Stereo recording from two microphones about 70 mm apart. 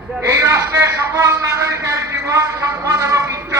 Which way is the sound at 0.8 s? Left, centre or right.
Right.